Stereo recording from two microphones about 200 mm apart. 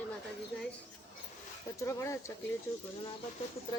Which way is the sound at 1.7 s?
15° left (ahead or behind).